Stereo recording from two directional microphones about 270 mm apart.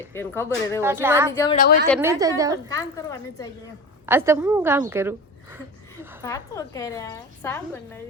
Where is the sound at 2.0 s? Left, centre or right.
Centre.